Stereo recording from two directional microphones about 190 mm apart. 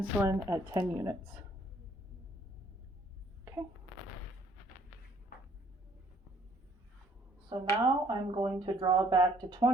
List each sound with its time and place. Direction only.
0.0 s a woman's voice: 15° right (ahead or behind)
3.4 s a sound: 15° right (ahead or behind)
7.5 s speech: 25° right (ahead or behind)